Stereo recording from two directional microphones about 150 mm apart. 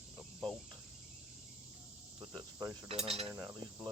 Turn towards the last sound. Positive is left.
turn(degrees=-20)  # may be behind; listen again after turning